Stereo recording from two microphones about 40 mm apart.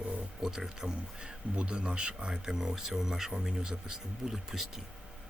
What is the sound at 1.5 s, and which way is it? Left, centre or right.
Speech, right.